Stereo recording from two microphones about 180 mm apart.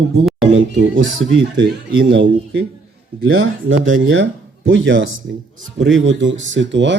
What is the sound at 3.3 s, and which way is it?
Speech, 90° right.